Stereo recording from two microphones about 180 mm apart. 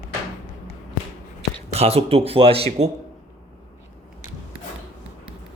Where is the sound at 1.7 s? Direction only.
35° right (ahead or behind).